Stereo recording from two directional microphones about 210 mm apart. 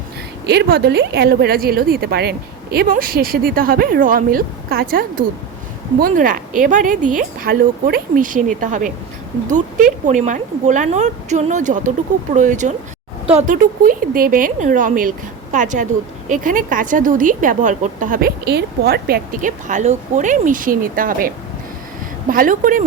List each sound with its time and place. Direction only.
0.4 s a woman's voice: 50° right (ahead or behind)